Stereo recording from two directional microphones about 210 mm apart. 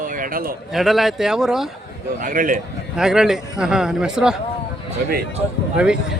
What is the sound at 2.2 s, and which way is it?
Speech, 40° right (ahead or behind).